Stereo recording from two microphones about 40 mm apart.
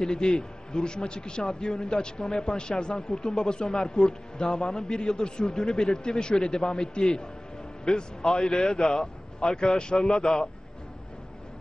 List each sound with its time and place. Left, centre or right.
0.0 s a man's voice: centre